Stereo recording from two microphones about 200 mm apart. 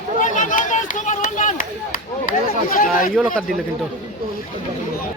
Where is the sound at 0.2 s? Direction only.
40° left (ahead or behind).